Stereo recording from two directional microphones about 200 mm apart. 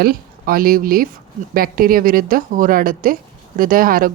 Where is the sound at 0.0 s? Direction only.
45° right (ahead or behind).